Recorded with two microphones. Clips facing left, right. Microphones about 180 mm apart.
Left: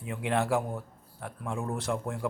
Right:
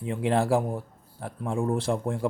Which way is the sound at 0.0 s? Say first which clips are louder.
Right 5 dB; 30° right (ahead or behind).